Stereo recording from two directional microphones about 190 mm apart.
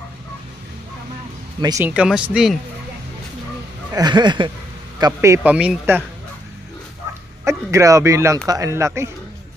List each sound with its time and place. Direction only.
1.6 s speech: 15° right (ahead or behind)
3.9 s a man's voice: 20° right (ahead or behind)
7.4 s a man's voice: 15° right (ahead or behind)